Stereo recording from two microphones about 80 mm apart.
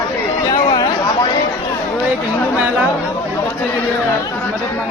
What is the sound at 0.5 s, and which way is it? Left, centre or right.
Chatter, left.